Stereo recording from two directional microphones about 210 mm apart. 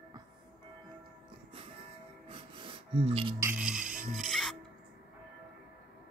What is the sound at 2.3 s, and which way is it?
Music, 25° right (ahead or behind).